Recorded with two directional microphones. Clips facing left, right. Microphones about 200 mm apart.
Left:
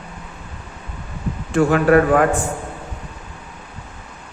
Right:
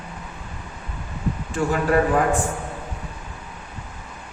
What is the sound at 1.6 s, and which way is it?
Speech, 70° left (ahead or behind).